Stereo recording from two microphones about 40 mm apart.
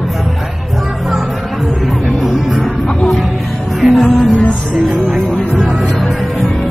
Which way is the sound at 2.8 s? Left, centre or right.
Left.